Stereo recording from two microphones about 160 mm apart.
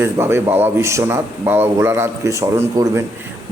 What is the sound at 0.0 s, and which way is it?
A man's voice, 15° right (ahead or behind).